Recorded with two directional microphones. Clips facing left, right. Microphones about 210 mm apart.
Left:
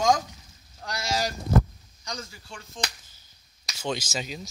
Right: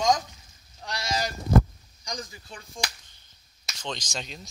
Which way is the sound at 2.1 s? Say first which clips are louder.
Right 1 dB; 15° right (ahead or behind).